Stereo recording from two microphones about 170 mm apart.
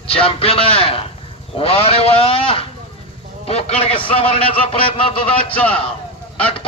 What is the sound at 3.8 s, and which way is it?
Speech, 35° left (ahead or behind).